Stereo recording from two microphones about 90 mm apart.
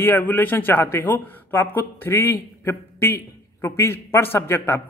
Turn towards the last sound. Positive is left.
turn(degrees=25)  # may be behind; listen again after turning